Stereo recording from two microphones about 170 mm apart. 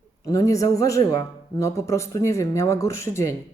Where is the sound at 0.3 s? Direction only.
20° left (ahead or behind).